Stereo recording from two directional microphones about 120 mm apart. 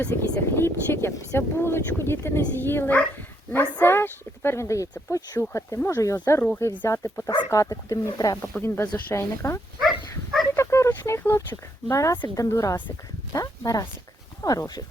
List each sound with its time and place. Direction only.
0.0 s speech: 20° left (ahead or behind)